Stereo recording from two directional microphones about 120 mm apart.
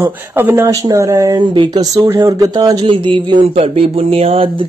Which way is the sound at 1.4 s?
40° right (ahead or behind).